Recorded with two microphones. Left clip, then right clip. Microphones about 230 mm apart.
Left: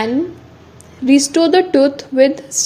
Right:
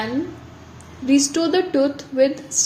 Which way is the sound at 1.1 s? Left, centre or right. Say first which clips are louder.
Left 6 dB; left.